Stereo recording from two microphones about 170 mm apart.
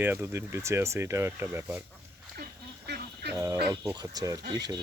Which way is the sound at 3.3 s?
20° right (ahead or behind).